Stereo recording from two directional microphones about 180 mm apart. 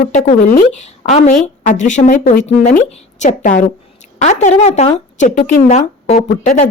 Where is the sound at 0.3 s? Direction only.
45° left (ahead or behind).